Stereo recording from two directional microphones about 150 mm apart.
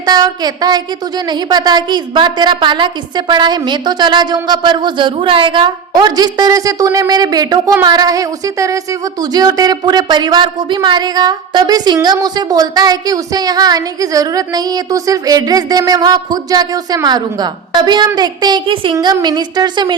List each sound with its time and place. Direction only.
0.0 s speech: 25° right (ahead or behind)